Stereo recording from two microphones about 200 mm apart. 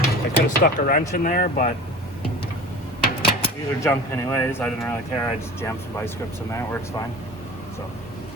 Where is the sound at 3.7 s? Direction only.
10° left (ahead or behind).